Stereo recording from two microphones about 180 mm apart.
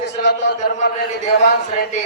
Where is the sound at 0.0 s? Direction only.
75° left (ahead or behind).